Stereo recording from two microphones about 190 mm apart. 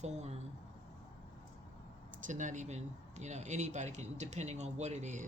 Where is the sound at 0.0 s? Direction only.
35° right (ahead or behind).